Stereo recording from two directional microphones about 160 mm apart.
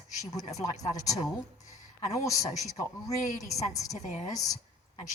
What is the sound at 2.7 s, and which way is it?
A woman's voice, 20° left (ahead or behind).